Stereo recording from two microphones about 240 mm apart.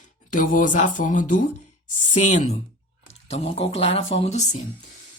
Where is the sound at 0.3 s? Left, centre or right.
Left.